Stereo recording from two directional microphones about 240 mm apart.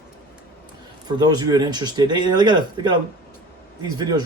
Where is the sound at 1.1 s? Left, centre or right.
Centre.